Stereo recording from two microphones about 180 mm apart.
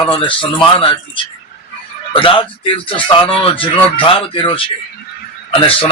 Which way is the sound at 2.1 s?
30° left (ahead or behind).